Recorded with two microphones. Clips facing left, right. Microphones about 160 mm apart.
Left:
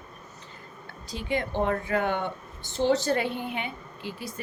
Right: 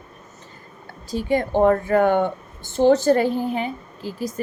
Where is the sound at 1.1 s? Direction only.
45° right (ahead or behind).